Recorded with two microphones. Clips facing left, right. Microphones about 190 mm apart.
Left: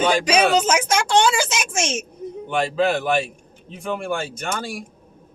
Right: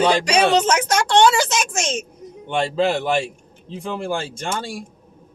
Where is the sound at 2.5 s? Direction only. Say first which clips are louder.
Right 1 dB; 30° right (ahead or behind).